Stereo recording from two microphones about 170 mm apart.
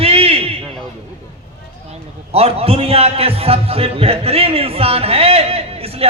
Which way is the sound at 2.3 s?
35° right (ahead or behind).